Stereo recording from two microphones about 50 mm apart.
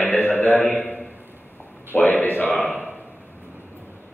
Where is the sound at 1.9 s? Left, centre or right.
Left.